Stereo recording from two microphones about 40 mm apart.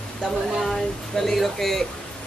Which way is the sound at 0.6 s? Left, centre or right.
Centre.